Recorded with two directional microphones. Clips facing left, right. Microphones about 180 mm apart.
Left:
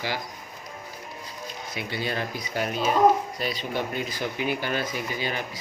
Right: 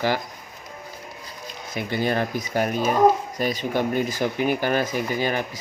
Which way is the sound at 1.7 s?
50° right (ahead or behind).